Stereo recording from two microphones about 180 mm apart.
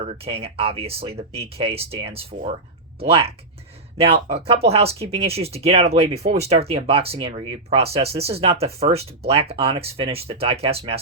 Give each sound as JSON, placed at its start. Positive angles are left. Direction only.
{"t": 0.0, "sound": "speech", "side_deg": -35}